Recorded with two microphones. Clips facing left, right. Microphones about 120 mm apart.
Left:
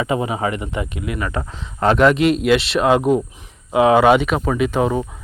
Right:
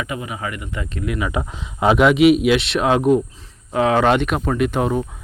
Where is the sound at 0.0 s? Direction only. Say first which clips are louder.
Left 7 dB; 30° left (ahead or behind).